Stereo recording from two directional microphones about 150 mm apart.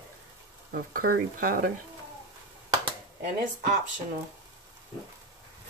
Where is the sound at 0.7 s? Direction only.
80° right.